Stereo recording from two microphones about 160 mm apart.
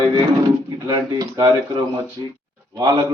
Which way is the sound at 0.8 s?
25° right (ahead or behind).